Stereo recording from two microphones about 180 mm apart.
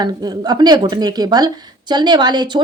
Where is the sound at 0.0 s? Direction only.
20° right (ahead or behind).